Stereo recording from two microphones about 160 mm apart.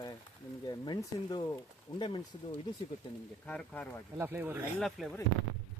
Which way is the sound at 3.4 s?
5° left (ahead or behind).